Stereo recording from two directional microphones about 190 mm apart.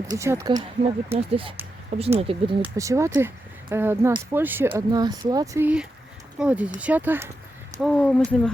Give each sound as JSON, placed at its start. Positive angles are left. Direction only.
{"t": 0.1, "sound": "speech", "side_deg": -15}
{"t": 1.1, "sound": "speech", "side_deg": -30}
{"t": 2.6, "sound": "speech", "side_deg": -15}
{"t": 4.7, "sound": "speech", "side_deg": -20}
{"t": 5.6, "sound": "speech", "side_deg": -5}
{"t": 7.8, "sound": "speech", "side_deg": 5}